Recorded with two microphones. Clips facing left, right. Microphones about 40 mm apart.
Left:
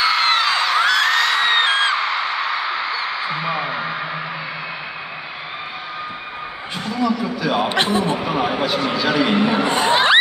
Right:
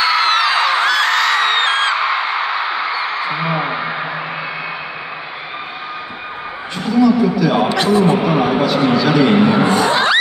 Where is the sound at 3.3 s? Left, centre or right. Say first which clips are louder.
Right 4 dB; right.